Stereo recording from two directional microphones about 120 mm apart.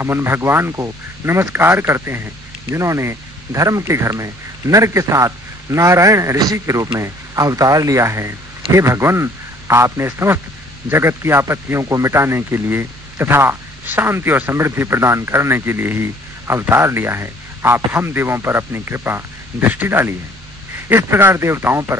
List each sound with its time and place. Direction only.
0.0 s speech: 20° right (ahead or behind)